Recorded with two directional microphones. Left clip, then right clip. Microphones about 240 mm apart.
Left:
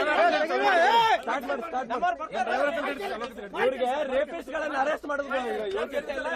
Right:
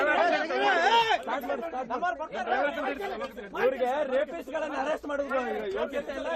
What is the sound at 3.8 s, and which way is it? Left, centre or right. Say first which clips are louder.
Speech: left 1 dB; centre.